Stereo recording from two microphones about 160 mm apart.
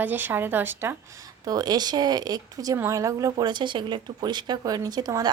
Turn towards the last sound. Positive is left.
turn(degrees=-25)  # may be behind; listen again after turning